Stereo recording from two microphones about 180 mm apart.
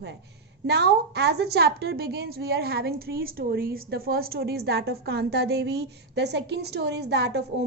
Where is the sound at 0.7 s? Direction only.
65° right (ahead or behind).